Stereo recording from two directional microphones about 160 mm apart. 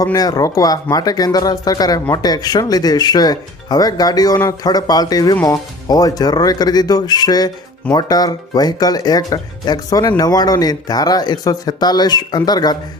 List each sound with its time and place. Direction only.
0.0 s speech: 25° left (ahead or behind)